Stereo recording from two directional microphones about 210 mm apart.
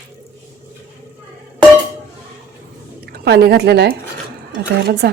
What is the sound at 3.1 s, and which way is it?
A woman's voice, 50° right (ahead or behind).